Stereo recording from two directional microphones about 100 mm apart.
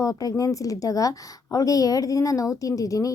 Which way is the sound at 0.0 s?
35° left (ahead or behind).